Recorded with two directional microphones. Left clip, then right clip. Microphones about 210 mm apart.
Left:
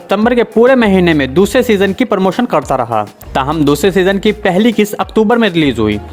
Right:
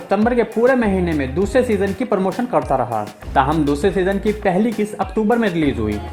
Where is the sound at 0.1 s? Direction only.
35° left (ahead or behind).